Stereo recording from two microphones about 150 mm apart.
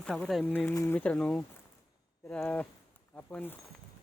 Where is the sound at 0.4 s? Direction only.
10° left (ahead or behind).